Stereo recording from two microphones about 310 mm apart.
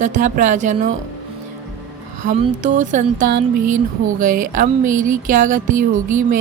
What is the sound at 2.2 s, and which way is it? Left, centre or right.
Speech, right.